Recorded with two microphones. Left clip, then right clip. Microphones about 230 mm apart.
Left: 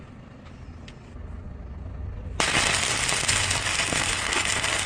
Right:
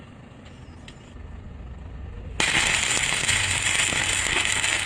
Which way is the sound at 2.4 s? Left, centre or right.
Left.